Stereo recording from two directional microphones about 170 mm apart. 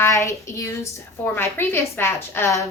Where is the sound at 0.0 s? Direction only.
20° left (ahead or behind).